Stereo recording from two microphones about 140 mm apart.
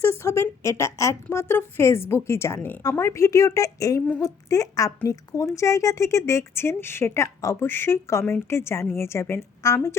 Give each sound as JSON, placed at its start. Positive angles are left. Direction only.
{"t": 0.0, "sound": "speech", "side_deg": 20}